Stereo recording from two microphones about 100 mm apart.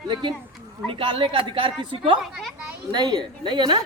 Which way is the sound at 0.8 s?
60° right (ahead or behind).